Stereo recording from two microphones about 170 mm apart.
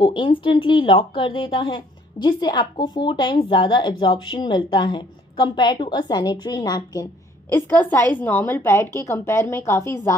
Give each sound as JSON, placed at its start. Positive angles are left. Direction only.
{"t": 0.0, "sound": "a woman's voice", "side_deg": 30}
{"t": 7.5, "sound": "a woman's voice", "side_deg": 10}